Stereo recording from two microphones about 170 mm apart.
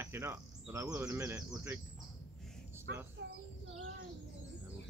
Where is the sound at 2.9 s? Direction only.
90° right.